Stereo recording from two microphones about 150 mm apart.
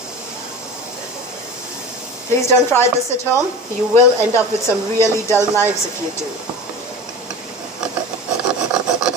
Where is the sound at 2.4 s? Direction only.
15° left (ahead or behind).